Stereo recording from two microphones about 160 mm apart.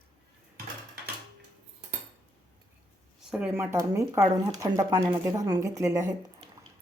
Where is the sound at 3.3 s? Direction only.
5° right (ahead or behind).